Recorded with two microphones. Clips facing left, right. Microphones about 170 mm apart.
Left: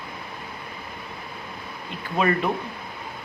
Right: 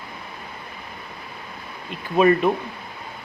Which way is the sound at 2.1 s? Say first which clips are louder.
Right 6 dB; 20° right (ahead or behind).